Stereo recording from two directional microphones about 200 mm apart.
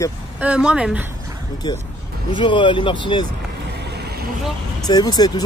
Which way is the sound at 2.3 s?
25° left (ahead or behind).